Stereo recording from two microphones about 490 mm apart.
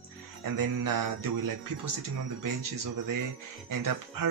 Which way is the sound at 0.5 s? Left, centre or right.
Right.